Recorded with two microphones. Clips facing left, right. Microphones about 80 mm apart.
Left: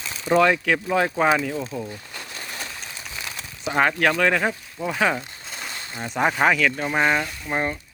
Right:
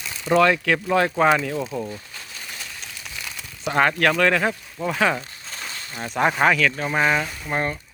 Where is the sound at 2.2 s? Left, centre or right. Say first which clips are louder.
Left 3 dB; left.